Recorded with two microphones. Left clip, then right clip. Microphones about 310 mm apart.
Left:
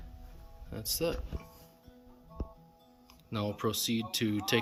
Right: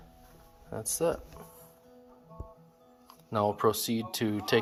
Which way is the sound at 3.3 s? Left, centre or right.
Centre.